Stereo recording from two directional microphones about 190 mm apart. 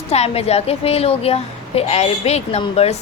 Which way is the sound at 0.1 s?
35° left (ahead or behind).